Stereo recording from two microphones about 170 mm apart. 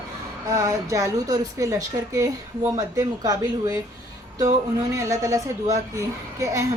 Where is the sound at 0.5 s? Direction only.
20° right (ahead or behind).